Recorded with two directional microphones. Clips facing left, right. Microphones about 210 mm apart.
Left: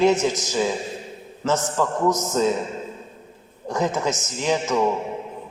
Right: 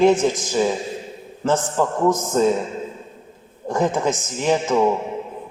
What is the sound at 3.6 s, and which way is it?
A man's voice, 55° right (ahead or behind).